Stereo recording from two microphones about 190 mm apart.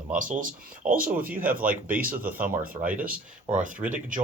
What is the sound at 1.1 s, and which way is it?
Speech, 10° right (ahead or behind).